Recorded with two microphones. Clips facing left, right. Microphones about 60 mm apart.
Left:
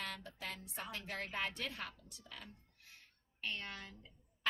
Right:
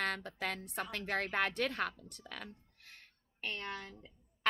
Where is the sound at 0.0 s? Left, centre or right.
Right.